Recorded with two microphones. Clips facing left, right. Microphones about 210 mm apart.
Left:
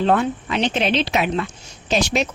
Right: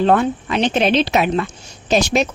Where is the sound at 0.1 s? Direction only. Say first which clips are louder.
Right 3 dB; 45° right (ahead or behind).